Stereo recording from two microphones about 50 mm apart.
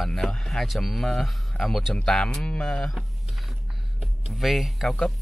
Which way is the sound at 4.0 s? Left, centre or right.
Centre.